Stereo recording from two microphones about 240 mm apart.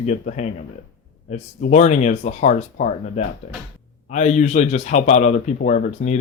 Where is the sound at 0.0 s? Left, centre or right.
Left.